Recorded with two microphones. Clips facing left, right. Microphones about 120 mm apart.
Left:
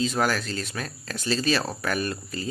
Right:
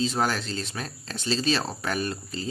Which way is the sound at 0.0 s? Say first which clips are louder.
Left 1 dB; 30° right (ahead or behind).